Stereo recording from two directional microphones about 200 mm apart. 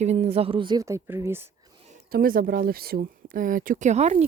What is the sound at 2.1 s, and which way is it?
Speech, 45° right (ahead or behind).